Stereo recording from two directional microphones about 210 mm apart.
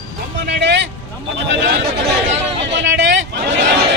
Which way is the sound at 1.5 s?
55° right (ahead or behind).